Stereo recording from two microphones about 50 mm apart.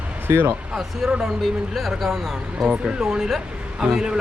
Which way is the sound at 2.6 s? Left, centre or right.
Centre.